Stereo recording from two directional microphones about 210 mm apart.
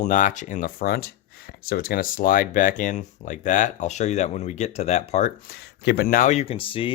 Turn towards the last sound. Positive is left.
turn(degrees=25)  # may be behind; listen again after turning